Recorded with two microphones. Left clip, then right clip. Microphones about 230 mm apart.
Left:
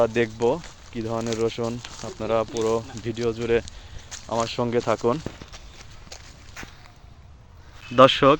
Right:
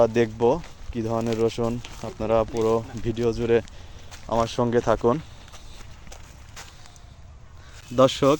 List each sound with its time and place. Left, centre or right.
0.0 s speech: right
1.8 s speech: centre
2.1 s speech: right
4.1 s a sound: centre
4.4 s speech: centre
7.9 s speech: centre